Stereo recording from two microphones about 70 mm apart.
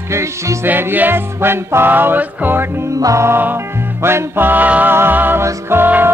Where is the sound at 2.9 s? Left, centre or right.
Right.